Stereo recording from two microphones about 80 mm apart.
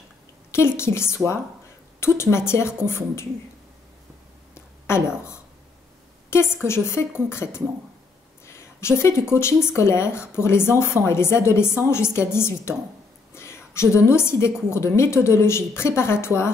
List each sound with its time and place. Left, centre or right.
0.5 s a woman's voice: left
4.8 s a woman's voice: left
8.5 s a sound: left
9.3 s a woman's voice: left